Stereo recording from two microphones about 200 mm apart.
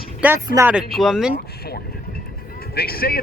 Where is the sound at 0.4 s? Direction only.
15° right (ahead or behind).